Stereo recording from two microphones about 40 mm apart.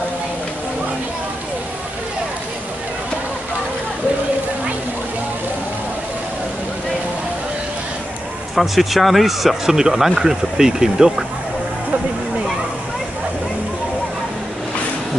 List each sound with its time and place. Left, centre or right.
8.5 s speech: centre